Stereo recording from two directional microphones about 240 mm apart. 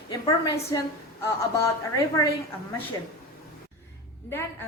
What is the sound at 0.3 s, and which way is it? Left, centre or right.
Speech, centre.